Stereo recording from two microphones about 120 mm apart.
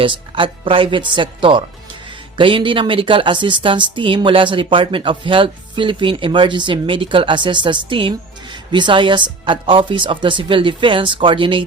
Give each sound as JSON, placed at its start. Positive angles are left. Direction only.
{"t": 0.0, "sound": "speech", "side_deg": -45}